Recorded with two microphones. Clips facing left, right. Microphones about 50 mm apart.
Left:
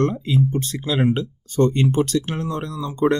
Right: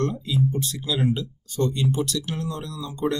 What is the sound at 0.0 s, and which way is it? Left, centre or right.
Speech, left.